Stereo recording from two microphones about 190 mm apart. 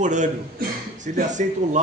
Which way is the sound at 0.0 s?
40° right (ahead or behind).